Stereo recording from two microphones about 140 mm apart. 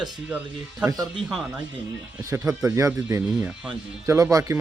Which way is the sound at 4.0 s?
25° right (ahead or behind).